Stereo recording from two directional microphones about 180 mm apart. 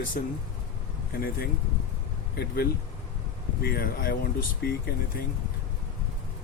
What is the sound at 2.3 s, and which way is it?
Speech, 60° left (ahead or behind).